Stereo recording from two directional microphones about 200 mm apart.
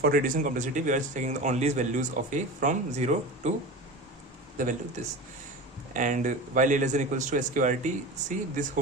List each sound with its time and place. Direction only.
0.0 s speech: 45° right (ahead or behind)
4.6 s speech: 40° right (ahead or behind)